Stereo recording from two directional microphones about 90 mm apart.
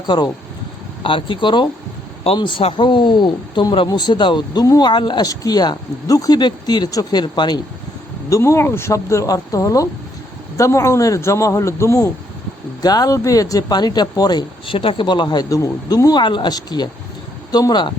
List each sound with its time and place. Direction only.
1.0 s speech: 70° left (ahead or behind)
2.2 s speech: 80° left; by 5.3 s 55° left (ahead or behind)
5.3 s speech: 40° left (ahead or behind)
8.3 s speech: 35° left (ahead or behind)
12.8 s speech: 45° left (ahead or behind)
14.7 s speech: 75° left (ahead or behind); by 15.4 s 55° left (ahead or behind)
15.4 s speech: 40° left (ahead or behind)
16.2 s speech: 60° left (ahead or behind)